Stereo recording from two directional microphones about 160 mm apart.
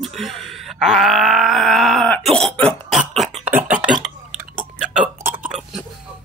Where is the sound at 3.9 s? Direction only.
5° right (ahead or behind).